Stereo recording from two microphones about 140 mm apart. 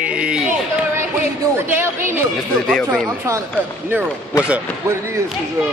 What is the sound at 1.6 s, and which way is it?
Speech, 15° right (ahead or behind).